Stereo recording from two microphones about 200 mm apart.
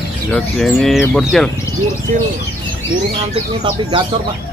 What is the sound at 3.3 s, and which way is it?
Speech, 25° right (ahead or behind).